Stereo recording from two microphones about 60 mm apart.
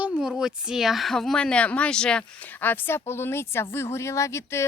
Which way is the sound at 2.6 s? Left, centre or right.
Left.